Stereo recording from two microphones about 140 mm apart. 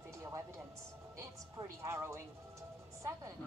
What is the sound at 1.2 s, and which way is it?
A woman's voice, 20° right (ahead or behind).